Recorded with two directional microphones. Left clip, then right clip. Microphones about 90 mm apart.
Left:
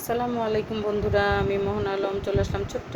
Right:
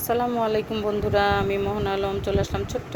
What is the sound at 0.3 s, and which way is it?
Speech, 10° right (ahead or behind).